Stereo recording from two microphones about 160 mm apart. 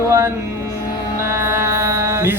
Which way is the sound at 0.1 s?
15° right (ahead or behind).